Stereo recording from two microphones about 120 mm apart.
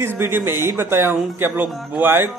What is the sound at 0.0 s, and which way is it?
A man's voice, 20° right (ahead or behind).